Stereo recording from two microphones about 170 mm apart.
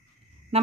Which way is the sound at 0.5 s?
35° right (ahead or behind).